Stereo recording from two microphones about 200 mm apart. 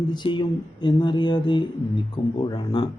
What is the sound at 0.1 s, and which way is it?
Speech, 25° left (ahead or behind).